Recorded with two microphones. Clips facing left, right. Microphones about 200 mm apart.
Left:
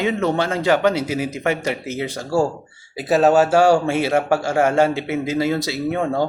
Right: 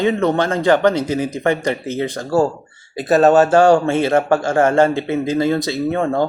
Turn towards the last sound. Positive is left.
turn(degrees=10)  # may be behind; listen again after turning